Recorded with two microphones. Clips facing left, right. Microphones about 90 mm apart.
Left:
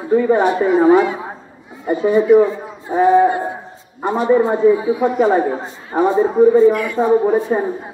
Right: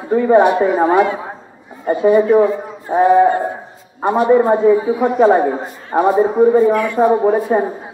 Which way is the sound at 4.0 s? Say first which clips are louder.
Right 2 dB; 45° right (ahead or behind).